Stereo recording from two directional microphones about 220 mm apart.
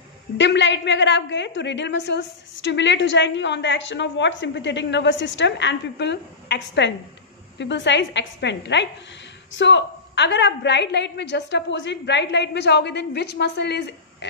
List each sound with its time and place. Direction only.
0.4 s a woman's voice: 55° left (ahead or behind)